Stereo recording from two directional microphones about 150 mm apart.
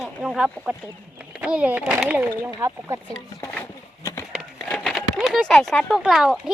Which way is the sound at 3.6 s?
20° left (ahead or behind).